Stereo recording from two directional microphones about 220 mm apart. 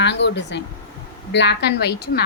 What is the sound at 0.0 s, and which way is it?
A woman's voice, 50° left (ahead or behind).